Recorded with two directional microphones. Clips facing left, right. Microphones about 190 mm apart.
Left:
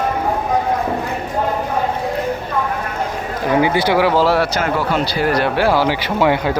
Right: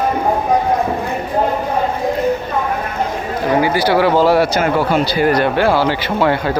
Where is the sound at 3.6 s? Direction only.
20° left (ahead or behind).